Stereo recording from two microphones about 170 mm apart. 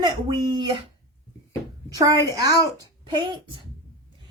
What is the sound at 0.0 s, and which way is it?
Speech, 25° right (ahead or behind).